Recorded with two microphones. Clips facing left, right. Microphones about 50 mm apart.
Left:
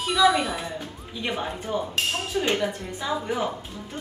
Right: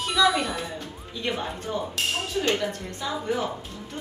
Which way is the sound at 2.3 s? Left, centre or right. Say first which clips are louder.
Left 2 dB; centre.